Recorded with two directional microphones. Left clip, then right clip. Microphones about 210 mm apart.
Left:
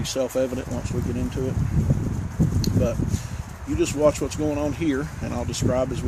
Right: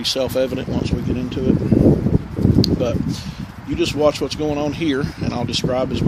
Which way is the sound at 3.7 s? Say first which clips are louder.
Right 3 dB; 30° right (ahead or behind).